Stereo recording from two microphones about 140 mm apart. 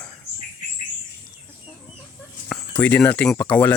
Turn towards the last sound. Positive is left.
turn(degrees=10)  # may be behind; listen again after turning